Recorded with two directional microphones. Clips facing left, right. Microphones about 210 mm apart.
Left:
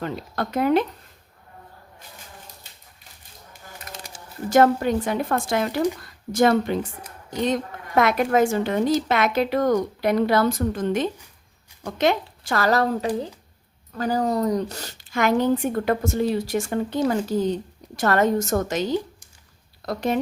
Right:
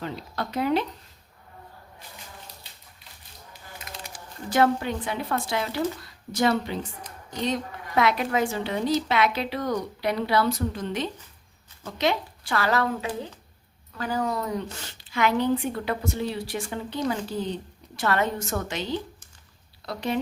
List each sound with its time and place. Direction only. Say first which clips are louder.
0.0 s a woman's voice: left 4 dB; 50° left (ahead or behind)
4.4 s a woman's voice: left 5 dB; 45° left (ahead or behind)